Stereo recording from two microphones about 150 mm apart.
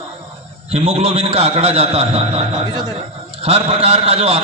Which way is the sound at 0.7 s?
40° right (ahead or behind).